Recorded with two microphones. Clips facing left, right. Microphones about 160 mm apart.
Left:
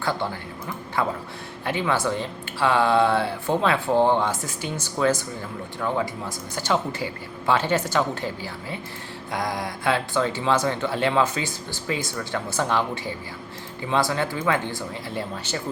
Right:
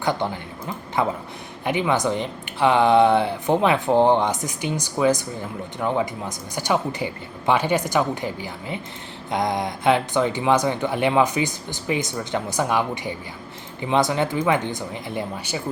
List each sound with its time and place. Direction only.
0.0 s speech: 20° right (ahead or behind)